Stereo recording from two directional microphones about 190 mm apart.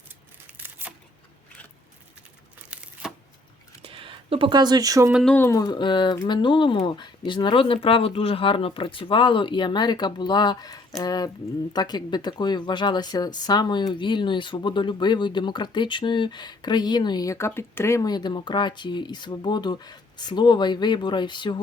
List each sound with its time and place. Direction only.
0.5 s tearing: 10° right (ahead or behind)
2.6 s a sound: 5° right (ahead or behind)
3.8 s speech: 25° right (ahead or behind)
5.1 s speech: 5° left (ahead or behind); by 21.6 s 25° left (ahead or behind)